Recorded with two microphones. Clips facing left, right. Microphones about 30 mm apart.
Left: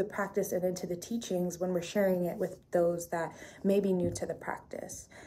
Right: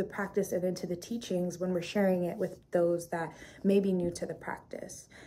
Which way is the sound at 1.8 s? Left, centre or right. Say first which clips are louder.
Even; right.